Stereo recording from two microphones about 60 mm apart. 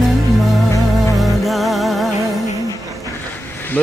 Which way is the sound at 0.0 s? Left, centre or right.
Centre.